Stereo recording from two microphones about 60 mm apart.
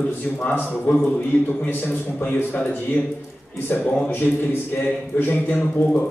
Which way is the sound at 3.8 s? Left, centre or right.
Left.